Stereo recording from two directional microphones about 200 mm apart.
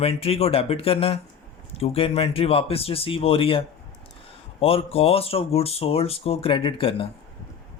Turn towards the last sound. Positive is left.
turn(degrees=25)  # may be behind; listen again after turning